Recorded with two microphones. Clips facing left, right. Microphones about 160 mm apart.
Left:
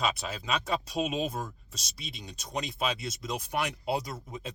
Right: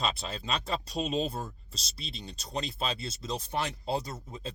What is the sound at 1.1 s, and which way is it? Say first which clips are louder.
Speech: right 1 dB; 30° right (ahead or behind).